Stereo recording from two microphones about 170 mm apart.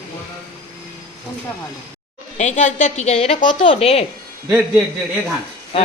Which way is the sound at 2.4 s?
45° left (ahead or behind).